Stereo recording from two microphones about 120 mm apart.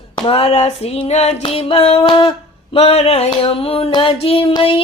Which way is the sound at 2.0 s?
40° left (ahead or behind).